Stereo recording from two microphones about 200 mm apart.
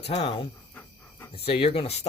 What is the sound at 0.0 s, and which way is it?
Speech, 30° left (ahead or behind).